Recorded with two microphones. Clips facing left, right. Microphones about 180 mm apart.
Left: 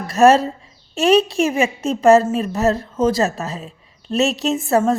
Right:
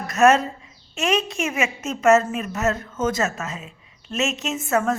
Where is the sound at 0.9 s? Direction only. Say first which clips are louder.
Left 8 dB; 35° left (ahead or behind).